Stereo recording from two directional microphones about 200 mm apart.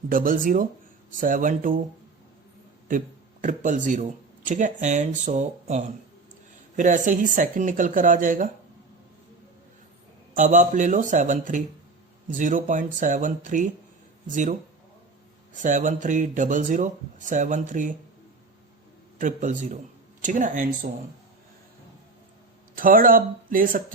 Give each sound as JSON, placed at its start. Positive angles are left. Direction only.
{"t": 0.1, "sound": "speech", "side_deg": -45}
{"t": 3.4, "sound": "speech", "side_deg": -40}
{"t": 10.3, "sound": "speech", "side_deg": -40}
{"t": 15.5, "sound": "speech", "side_deg": -40}
{"t": 19.2, "sound": "speech", "side_deg": -40}
{"t": 22.7, "sound": "speech", "side_deg": -45}